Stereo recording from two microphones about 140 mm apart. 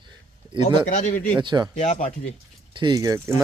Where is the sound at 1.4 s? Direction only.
35° right (ahead or behind).